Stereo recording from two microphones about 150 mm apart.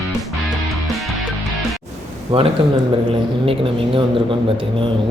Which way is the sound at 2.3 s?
35° right (ahead or behind).